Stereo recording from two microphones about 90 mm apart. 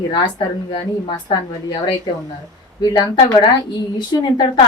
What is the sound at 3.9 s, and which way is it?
Speech, 60° left (ahead or behind).